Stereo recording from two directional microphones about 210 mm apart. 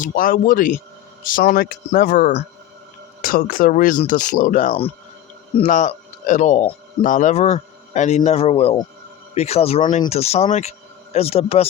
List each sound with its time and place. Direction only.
0.0 s speech: 40° left (ahead or behind)